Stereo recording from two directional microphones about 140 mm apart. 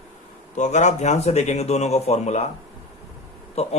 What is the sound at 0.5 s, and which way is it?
Speech, 55° left (ahead or behind).